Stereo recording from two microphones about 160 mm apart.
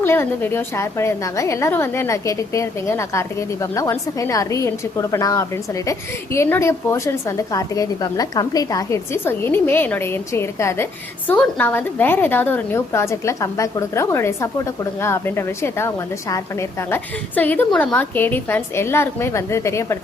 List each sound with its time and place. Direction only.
0.0 s a woman's voice: 15° left (ahead or behind)